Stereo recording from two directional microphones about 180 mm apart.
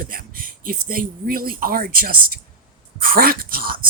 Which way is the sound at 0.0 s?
55° right (ahead or behind).